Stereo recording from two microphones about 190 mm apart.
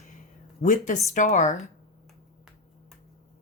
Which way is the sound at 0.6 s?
40° left (ahead or behind).